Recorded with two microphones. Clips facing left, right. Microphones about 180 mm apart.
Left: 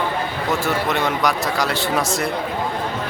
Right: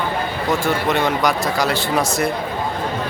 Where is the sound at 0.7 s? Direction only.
Centre (ahead or behind).